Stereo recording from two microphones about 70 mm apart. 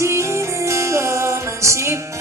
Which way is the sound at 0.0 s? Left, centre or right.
Right.